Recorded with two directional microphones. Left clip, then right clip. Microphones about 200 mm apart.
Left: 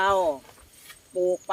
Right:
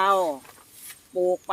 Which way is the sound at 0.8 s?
50° right (ahead or behind).